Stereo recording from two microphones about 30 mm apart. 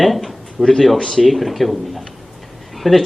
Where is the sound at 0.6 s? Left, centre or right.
Centre.